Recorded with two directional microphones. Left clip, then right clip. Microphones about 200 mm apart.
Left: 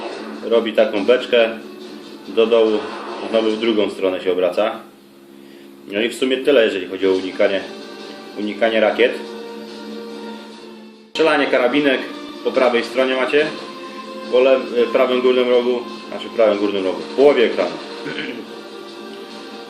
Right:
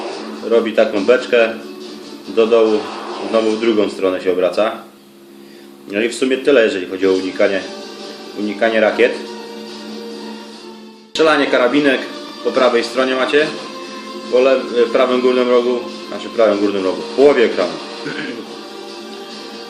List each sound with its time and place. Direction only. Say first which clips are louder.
0.5 s a man's voice: right 2 dB; 10° right (ahead or behind)
5.9 s a man's voice: right 2 dB; 10° right (ahead or behind)
11.1 s a man's voice: right 2 dB; 10° right (ahead or behind)